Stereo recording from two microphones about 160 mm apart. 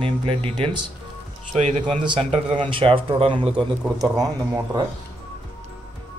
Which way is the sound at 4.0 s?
25° right (ahead or behind).